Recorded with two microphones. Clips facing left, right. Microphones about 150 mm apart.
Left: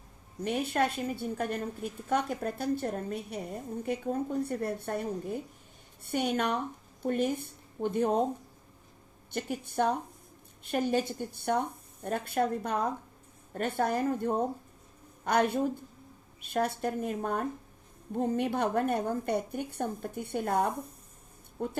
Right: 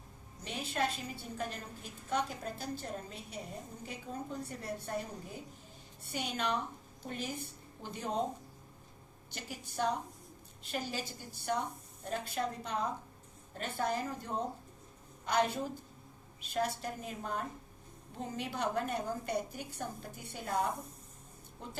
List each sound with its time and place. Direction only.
0.4 s a woman's voice: 55° left (ahead or behind)
9.3 s a woman's voice: 55° left (ahead or behind)